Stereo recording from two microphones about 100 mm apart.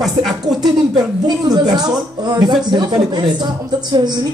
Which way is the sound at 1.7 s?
40° right (ahead or behind).